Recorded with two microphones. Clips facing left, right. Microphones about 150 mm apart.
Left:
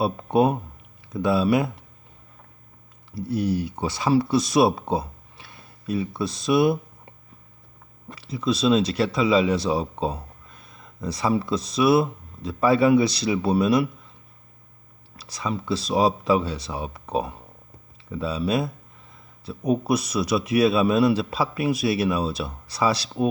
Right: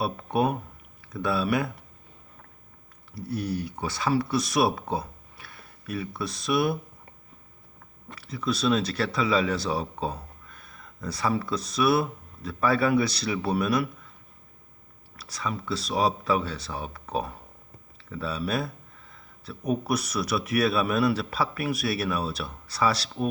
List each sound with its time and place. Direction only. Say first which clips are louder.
0.0 s speech: left 5 dB; 25° left (ahead or behind)
3.2 s speech: left 6 dB; 20° left (ahead or behind)
8.0 s speech: left 4 dB; 25° left (ahead or behind)
15.1 s speech: left 4 dB; 20° left (ahead or behind)